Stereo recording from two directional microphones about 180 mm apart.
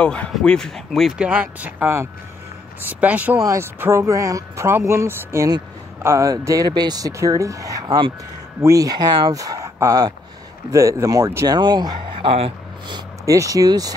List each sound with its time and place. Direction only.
0.0 s speech: 5° left (ahead or behind); by 13.9 s 20° right (ahead or behind)